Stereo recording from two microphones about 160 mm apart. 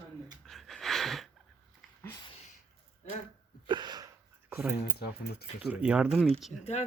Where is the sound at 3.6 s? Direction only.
25° right (ahead or behind).